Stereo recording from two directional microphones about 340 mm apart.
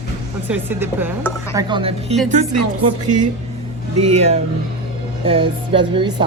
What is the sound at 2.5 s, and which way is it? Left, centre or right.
Speech, right.